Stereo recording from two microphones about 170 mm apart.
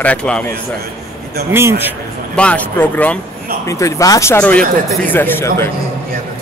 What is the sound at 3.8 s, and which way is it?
A man's voice, 20° left (ahead or behind).